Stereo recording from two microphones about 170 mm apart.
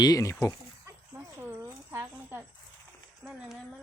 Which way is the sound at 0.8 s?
15° right (ahead or behind).